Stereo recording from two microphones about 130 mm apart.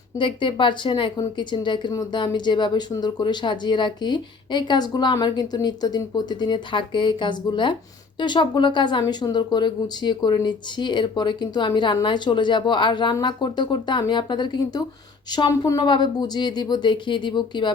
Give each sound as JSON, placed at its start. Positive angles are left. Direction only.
{"t": 0.2, "sound": "speech", "side_deg": 40}